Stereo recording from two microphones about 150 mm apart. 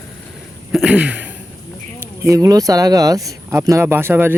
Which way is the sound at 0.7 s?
5° right (ahead or behind).